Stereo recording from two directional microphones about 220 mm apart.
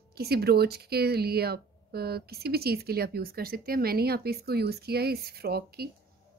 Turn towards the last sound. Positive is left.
turn(degrees=-45)  # may be behind; listen again after turning